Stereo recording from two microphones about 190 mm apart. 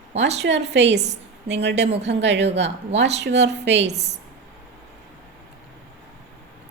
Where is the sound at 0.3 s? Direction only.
65° right (ahead or behind).